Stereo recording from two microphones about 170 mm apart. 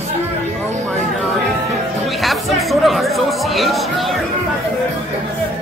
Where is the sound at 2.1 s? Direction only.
Centre (ahead or behind).